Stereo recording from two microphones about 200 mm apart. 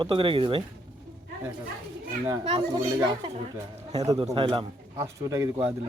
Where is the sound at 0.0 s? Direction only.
25° right (ahead or behind).